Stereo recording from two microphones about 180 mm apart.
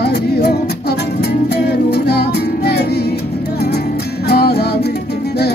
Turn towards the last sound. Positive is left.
turn(degrees=60)  # may be behind; listen again after turning